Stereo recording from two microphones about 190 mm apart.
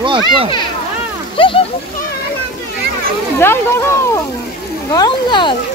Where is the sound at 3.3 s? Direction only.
10° left (ahead or behind).